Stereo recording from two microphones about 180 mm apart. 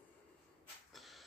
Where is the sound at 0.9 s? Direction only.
Centre (ahead or behind).